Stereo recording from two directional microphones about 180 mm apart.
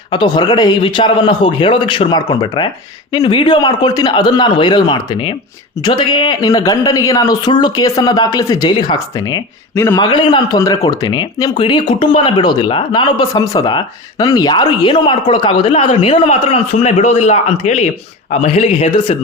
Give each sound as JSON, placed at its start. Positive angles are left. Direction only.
{"t": 0.1, "sound": "speech", "side_deg": 25}
{"t": 10.1, "sound": "speech", "side_deg": 25}